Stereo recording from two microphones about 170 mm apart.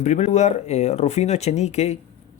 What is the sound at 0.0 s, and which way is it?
Speech, 45° left (ahead or behind).